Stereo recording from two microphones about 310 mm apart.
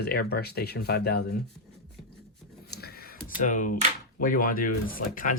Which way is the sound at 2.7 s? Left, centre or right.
Left.